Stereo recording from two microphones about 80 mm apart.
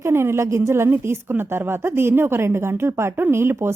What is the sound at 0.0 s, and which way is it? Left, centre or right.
A woman's voice, right.